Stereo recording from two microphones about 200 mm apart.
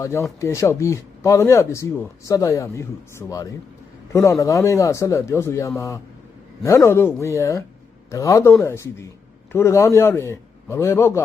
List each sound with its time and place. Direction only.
0.0 s speech: 15° left (ahead or behind)